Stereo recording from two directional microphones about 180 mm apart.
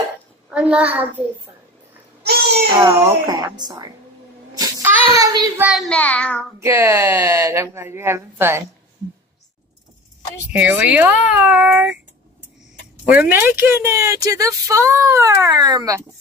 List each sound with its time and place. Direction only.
0.5 s a child's voice: 5° right (ahead or behind)
2.8 s speech: 15° right (ahead or behind)
4.6 s child singing: 20° right (ahead or behind)
5.6 s a child's voice: 5° right (ahead or behind)
5.9 s child singing: 5° left (ahead or behind)
6.6 s speech: 15° right (ahead or behind)
10.5 s speech: 10° right (ahead or behind)
13.1 s speech: 10° right (ahead or behind)